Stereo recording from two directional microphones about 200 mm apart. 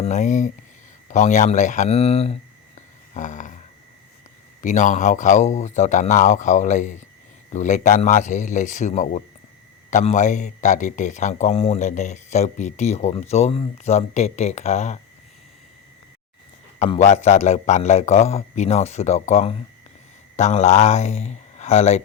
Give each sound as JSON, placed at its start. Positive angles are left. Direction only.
{"t": 0.0, "sound": "speech", "side_deg": 35}
{"t": 3.2, "sound": "a sound", "side_deg": 40}
{"t": 4.6, "sound": "speech", "side_deg": 40}
{"t": 16.8, "sound": "speech", "side_deg": 30}